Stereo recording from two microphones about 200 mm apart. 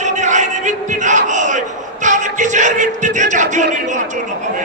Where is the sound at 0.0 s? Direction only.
35° right (ahead or behind).